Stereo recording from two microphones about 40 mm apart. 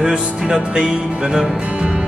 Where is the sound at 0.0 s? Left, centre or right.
Right.